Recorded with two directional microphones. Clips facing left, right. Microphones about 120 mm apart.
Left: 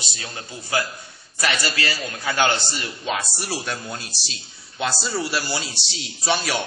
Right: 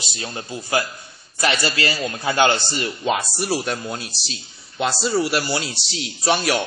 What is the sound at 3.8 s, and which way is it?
A man's voice, 5° right (ahead or behind).